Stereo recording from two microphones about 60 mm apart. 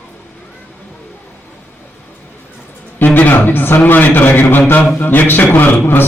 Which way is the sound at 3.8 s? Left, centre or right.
Left.